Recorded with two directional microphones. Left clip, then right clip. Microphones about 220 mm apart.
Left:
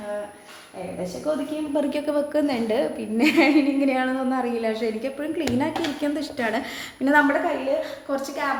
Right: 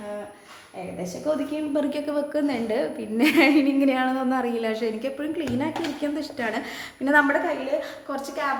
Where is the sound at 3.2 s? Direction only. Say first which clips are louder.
Even; 10° right (ahead or behind).